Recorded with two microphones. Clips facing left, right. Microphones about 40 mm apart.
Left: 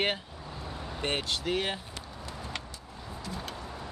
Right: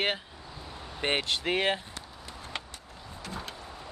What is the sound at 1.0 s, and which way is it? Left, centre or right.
Speech, right.